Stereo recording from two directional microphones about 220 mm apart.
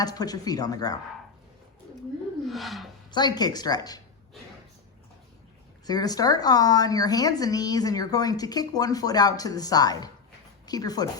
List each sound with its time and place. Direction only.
0.0 s a woman's voice: 15° left (ahead or behind)
2.5 s a sound: centre (ahead or behind)
3.1 s a woman's voice: 20° left (ahead or behind)
5.8 s a woman's voice: 15° left (ahead or behind)